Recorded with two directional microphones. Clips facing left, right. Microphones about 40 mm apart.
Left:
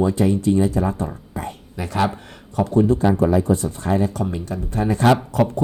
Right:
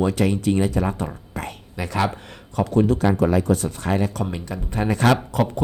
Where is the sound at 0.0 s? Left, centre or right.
Right.